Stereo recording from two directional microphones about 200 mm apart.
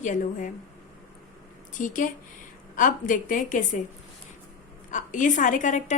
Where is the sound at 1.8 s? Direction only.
40° left (ahead or behind).